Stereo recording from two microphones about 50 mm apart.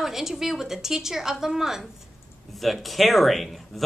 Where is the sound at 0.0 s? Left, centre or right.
Centre.